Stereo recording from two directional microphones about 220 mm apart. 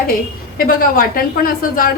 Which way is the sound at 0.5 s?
40° left (ahead or behind).